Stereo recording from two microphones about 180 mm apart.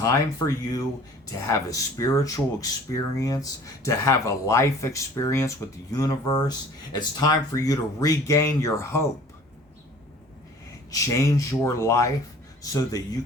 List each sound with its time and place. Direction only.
0.0 s speech: 20° left (ahead or behind)
10.9 s speech: 15° left (ahead or behind)